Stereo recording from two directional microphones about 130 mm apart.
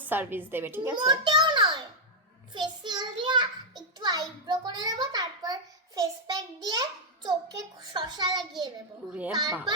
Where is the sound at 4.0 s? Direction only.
30° right (ahead or behind).